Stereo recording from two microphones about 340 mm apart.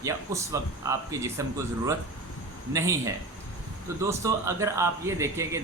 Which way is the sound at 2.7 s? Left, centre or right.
Centre.